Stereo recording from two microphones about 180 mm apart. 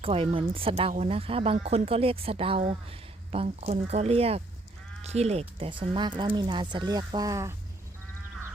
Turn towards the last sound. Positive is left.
turn(degrees=-15)  # may be behind; listen again after turning